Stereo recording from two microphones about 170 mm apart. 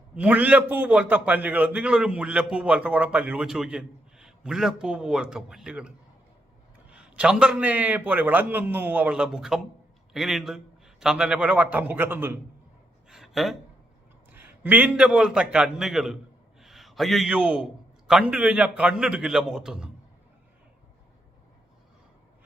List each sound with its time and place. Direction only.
0.2 s a man's voice: 10° right (ahead or behind)
6.9 s a man's voice: 5° right (ahead or behind)
13.1 s a sound: centre (ahead or behind)
14.3 s a man's voice: 10° right (ahead or behind)
16.6 s a sound: centre (ahead or behind)
18.1 s a man's voice: 5° right (ahead or behind)